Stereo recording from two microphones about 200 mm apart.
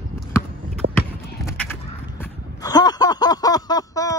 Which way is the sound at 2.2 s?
20° left (ahead or behind).